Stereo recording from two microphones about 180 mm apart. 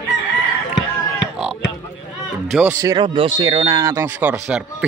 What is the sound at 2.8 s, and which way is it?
Speech, 20° right (ahead or behind).